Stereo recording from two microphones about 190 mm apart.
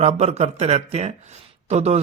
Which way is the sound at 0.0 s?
35° right (ahead or behind).